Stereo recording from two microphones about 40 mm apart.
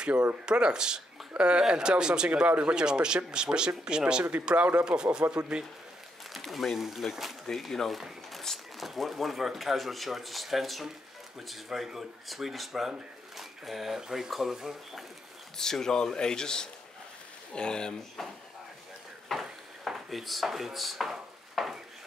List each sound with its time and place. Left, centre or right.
0.5 s speech: right
2.4 s speech: right
2.7 s speech: right
6.4 s speech: centre
7.4 s speech: centre
8.0 s a sound: centre
8.7 s speech: centre
15.5 s a man's voice: centre
19.3 s a sound: centre
19.9 s speech: centre
21.1 s a sound: centre